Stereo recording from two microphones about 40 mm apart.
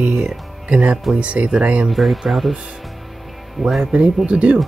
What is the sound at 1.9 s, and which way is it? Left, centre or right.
Speech, centre.